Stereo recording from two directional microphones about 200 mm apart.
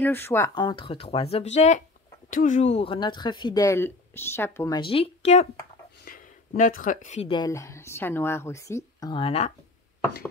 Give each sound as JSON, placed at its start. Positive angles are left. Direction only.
{"t": 0.0, "sound": "speech", "side_deg": 10}
{"t": 7.3, "sound": "a woman's voice", "side_deg": 15}
{"t": 9.1, "sound": "speech", "side_deg": 30}